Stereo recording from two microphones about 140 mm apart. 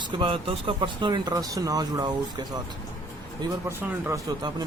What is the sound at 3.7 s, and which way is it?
Speech, 15° right (ahead or behind).